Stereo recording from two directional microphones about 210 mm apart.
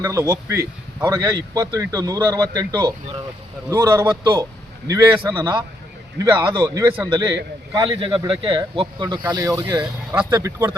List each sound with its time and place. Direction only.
0.0 s speech: 15° right (ahead or behind)
10.3 s speech: 15° right (ahead or behind)